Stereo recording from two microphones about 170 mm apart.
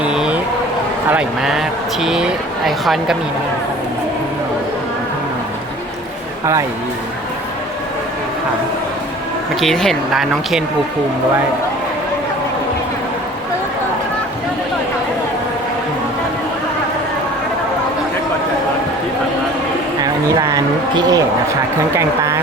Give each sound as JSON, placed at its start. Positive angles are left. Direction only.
{"t": 0.0, "sound": "a sound", "side_deg": -5}
{"t": 1.1, "sound": "speech", "side_deg": -5}
{"t": 9.6, "sound": "speech", "side_deg": 0}
{"t": 20.0, "sound": "speech", "side_deg": -20}